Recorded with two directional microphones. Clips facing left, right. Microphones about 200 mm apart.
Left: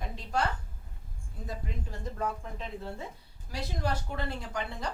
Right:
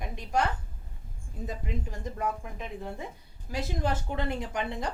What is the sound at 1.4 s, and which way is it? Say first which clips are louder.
Speech: right 4 dB; 15° right (ahead or behind).